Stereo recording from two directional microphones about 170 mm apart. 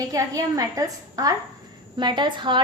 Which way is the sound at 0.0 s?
20° right (ahead or behind).